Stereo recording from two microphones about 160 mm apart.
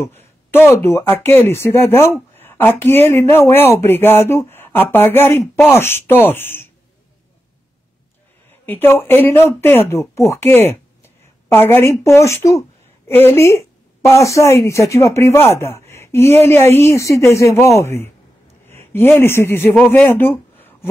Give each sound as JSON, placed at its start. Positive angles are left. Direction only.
{"t": 0.0, "sound": "speech", "side_deg": 15}
{"t": 8.6, "sound": "a woman's voice", "side_deg": 15}